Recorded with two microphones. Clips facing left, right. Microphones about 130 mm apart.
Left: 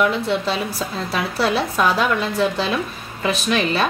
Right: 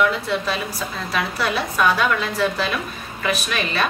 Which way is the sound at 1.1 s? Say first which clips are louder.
Left 3 dB; 30° left (ahead or behind).